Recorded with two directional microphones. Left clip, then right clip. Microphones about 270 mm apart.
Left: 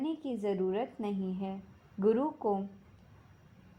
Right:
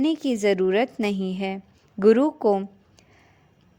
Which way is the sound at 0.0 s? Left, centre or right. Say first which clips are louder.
Right 13 dB; right.